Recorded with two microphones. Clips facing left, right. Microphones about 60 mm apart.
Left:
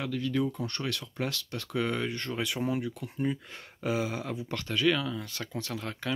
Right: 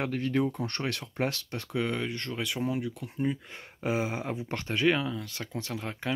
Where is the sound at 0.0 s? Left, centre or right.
Right.